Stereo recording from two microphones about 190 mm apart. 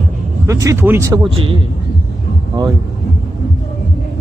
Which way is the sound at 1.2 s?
30° right (ahead or behind).